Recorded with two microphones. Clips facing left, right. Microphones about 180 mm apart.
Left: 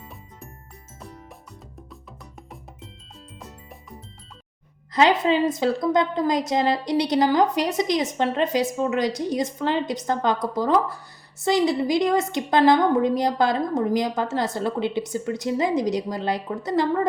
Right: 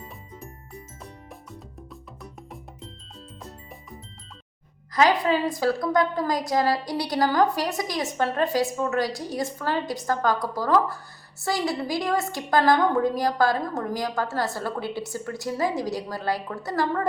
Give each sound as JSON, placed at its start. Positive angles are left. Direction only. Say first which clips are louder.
{"t": 4.9, "sound": "a woman's voice", "louder": "left 2 dB", "side_deg": 25}